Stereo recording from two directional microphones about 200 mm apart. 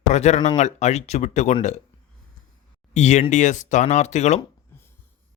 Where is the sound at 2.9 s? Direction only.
35° left (ahead or behind).